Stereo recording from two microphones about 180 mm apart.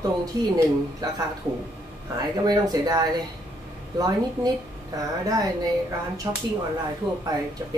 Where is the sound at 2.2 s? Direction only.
20° right (ahead or behind).